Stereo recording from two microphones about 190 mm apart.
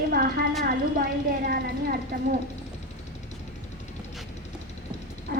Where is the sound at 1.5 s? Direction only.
50° right (ahead or behind).